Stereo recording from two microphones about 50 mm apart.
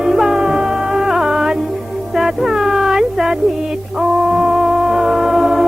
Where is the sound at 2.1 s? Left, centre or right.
Centre.